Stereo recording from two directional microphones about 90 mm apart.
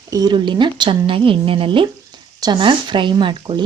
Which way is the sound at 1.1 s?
80° right.